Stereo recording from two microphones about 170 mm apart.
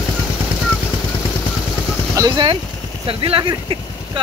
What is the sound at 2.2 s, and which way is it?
Speech, 25° right (ahead or behind).